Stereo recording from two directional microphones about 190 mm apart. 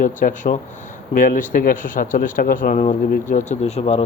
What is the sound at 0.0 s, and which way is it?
Speech, 45° left (ahead or behind).